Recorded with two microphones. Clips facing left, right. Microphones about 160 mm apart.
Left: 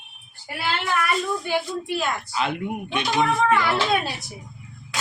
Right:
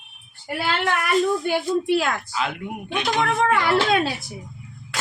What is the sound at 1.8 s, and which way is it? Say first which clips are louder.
Speech: right 5 dB; 75° right (ahead or behind).